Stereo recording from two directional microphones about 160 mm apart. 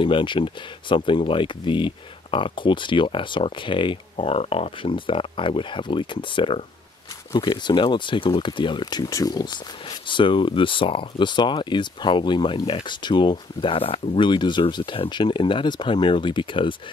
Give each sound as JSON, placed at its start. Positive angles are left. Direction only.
{"t": 0.0, "sound": "speech", "side_deg": 30}